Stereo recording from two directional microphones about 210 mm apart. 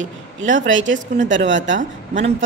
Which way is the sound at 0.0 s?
65° right (ahead or behind).